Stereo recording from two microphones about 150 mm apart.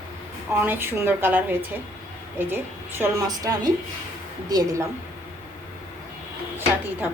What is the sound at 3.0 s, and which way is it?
A woman's voice, 25° right (ahead or behind).